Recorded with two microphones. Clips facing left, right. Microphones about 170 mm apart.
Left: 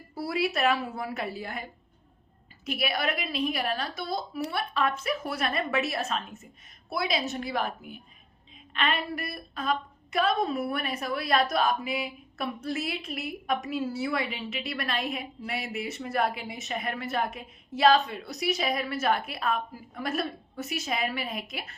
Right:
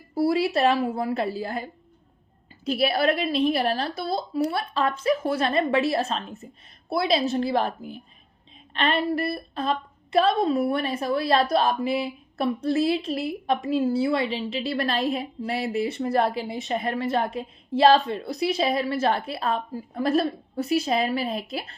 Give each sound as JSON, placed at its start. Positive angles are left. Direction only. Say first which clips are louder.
{"t": 0.1, "sound": "a woman's voice", "louder": "right 7 dB", "side_deg": -25}